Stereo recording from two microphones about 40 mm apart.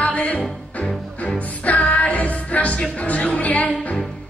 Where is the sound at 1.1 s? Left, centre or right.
Left.